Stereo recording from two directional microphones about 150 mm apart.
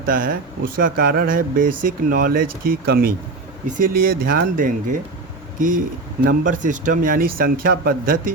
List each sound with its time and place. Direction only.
0.0 s speech: 70° right (ahead or behind)
3.7 s speech: 70° right (ahead or behind)